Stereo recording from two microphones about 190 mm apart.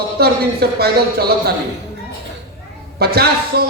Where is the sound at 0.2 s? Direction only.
55° right (ahead or behind).